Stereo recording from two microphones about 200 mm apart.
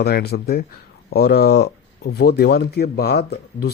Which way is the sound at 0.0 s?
55° left (ahead or behind).